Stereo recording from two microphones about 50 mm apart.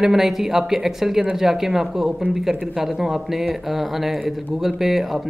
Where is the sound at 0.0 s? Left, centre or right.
Centre.